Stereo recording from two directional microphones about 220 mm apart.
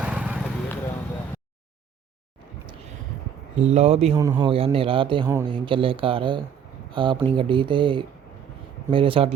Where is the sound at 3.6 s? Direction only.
30° right (ahead or behind).